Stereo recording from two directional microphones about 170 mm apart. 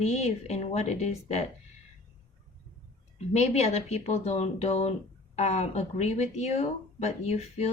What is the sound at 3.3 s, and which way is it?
Speech, 40° left (ahead or behind).